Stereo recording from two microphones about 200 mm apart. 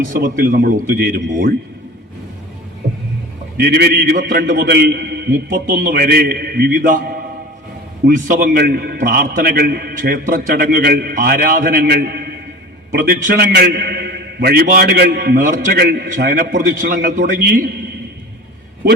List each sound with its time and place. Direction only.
0.1 s a man's voice: 45° right (ahead or behind)
3.6 s a man's voice: 50° right (ahead or behind)